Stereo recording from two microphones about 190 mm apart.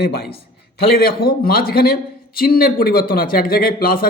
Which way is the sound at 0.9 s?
50° left (ahead or behind).